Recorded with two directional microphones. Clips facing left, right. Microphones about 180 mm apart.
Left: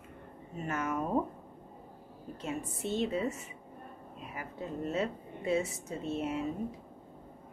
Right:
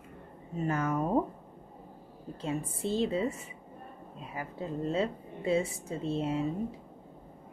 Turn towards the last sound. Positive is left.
turn(degrees=-30)  # may be behind; listen again after turning